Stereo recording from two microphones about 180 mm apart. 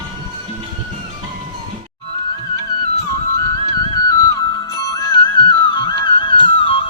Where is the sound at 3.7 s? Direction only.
20° left (ahead or behind).